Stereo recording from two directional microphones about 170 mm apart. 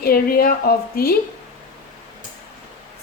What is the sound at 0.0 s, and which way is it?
A woman's voice, 60° left (ahead or behind).